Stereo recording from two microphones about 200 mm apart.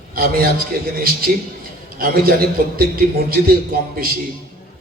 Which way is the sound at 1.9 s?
45° right (ahead or behind).